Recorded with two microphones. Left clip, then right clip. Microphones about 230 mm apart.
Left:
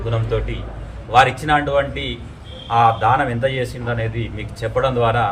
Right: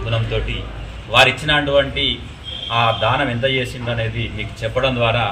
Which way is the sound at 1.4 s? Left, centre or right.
Centre.